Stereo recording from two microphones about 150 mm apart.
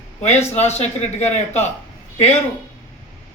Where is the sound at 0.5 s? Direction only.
45° left (ahead or behind).